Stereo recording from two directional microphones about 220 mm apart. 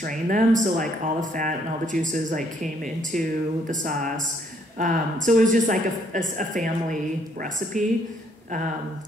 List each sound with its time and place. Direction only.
0.0 s speech: 35° right (ahead or behind)